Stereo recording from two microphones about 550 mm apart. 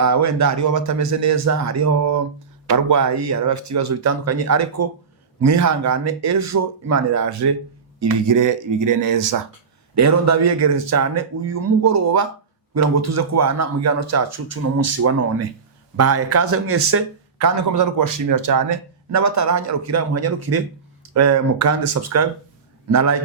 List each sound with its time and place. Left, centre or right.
0.0 s speech: right